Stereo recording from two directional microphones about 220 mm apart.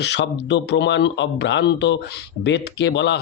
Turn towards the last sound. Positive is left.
turn(degrees=55)  # may be behind; listen again after turning